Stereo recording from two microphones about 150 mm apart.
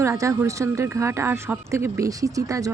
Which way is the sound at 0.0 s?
20° right (ahead or behind).